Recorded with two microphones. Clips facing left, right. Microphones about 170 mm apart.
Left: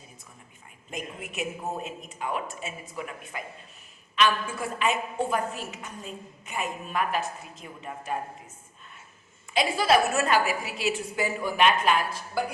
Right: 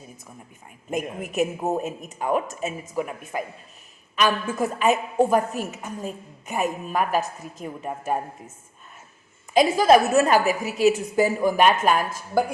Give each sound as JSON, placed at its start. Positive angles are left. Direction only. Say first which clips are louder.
{"t": 0.9, "sound": "a woman's voice", "louder": "right 9 dB", "side_deg": -45}
{"t": 9.5, "sound": "a woman's voice", "louder": "right 7 dB", "side_deg": -45}